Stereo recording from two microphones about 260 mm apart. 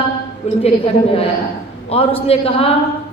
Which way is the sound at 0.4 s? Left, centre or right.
Left.